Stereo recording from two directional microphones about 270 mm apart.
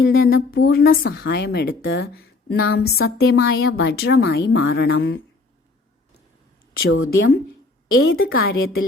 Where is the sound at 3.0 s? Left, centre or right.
Left.